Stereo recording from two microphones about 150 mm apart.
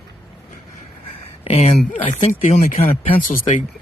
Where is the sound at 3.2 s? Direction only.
65° left (ahead or behind).